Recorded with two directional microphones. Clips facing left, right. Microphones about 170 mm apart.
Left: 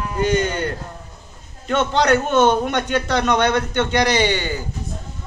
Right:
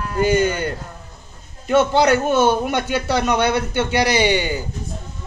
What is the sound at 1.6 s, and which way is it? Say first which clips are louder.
A man's voice: right 3 dB; 10° right (ahead or behind).